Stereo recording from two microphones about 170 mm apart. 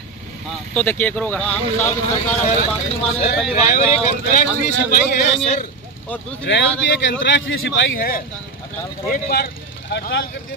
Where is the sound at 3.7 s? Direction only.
55° left (ahead or behind).